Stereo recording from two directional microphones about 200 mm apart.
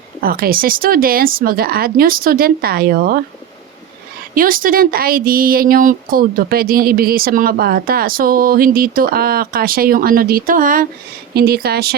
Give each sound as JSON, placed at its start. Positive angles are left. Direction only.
{"t": 0.2, "sound": "speech", "side_deg": -45}
{"t": 4.4, "sound": "speech", "side_deg": -45}